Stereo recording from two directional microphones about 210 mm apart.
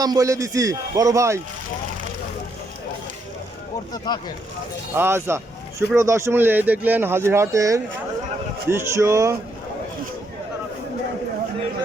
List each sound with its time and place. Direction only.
0.0 s speech: 15° right (ahead or behind)
3.9 s speech: 20° left (ahead or behind)
4.9 s speech: 10° right (ahead or behind)